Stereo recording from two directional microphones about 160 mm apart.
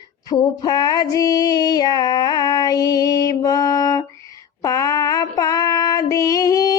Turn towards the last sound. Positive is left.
turn(degrees=20)  # may be behind; listen again after turning